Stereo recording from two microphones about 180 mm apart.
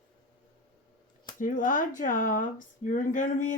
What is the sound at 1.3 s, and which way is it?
Speech, 45° left (ahead or behind).